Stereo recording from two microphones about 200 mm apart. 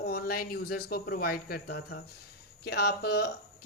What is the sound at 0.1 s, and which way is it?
Speech, 50° left (ahead or behind).